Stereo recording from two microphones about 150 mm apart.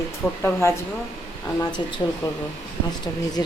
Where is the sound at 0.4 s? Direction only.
15° left (ahead or behind).